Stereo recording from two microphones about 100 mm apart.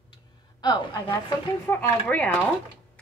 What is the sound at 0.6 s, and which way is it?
Speech, 45° left (ahead or behind).